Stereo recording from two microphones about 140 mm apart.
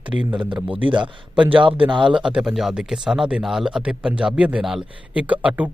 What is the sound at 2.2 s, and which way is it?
Speech, 5° right (ahead or behind).